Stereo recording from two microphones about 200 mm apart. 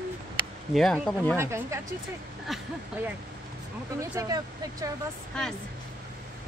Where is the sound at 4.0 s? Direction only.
15° right (ahead or behind).